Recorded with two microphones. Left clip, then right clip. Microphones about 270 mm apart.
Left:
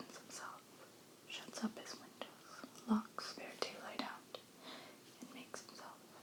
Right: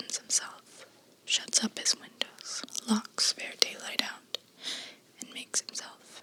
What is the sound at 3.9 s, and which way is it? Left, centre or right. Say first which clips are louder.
Whispering: right 13 dB; right.